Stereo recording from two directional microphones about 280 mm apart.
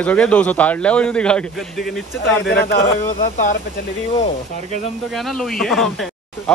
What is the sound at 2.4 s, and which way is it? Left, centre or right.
Speech, left.